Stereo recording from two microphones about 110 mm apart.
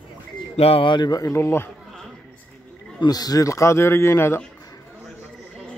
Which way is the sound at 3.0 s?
35° left (ahead or behind).